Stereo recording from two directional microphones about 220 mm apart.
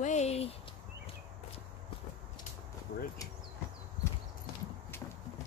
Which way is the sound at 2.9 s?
50° left (ahead or behind).